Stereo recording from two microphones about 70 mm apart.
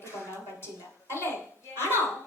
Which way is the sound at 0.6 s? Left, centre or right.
Left.